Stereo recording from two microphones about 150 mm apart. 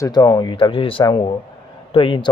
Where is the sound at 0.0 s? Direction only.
25° left (ahead or behind).